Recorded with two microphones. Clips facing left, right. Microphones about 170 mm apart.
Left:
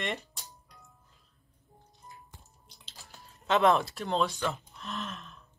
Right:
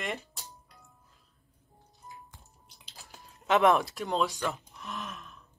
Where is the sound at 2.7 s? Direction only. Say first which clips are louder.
Even; 10° right (ahead or behind).